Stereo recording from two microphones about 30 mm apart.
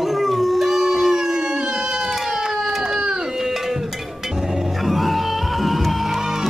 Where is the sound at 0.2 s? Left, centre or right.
Centre.